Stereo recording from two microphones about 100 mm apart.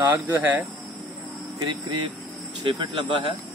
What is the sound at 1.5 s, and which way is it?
Speech, 40° right (ahead or behind).